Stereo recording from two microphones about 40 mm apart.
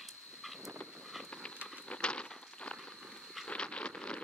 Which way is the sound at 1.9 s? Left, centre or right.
Left.